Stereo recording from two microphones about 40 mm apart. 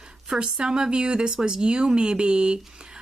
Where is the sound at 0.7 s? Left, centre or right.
Right.